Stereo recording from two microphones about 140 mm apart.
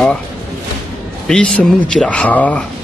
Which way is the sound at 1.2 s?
5° left (ahead or behind).